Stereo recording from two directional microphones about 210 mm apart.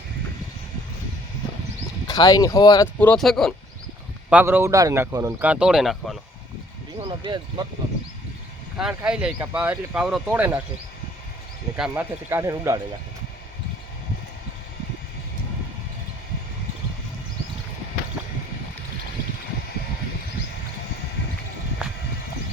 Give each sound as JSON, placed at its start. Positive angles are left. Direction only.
{"t": 2.0, "sound": "speech", "side_deg": 20}
{"t": 7.0, "sound": "speech", "side_deg": -25}
{"t": 8.8, "sound": "speech", "side_deg": -5}
{"t": 11.8, "sound": "speech", "side_deg": -10}